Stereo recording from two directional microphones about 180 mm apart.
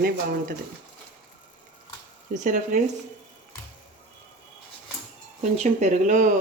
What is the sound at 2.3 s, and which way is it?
Speech, 45° right (ahead or behind).